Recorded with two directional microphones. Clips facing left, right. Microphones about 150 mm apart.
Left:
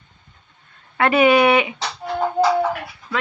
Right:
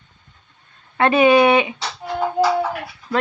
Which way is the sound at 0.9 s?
25° right (ahead or behind).